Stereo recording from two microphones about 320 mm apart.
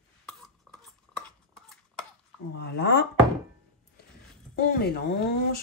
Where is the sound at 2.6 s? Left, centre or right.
Left.